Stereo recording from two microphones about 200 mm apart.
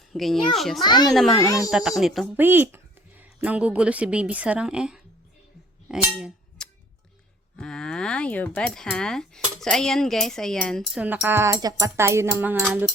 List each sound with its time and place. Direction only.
0.1 s speech: centre (ahead or behind)
0.9 s a child's voice: 20° left (ahead or behind)
1.7 s speech: centre (ahead or behind)
5.9 s a sound: centre (ahead or behind)
7.6 s speech: 5° left (ahead or behind)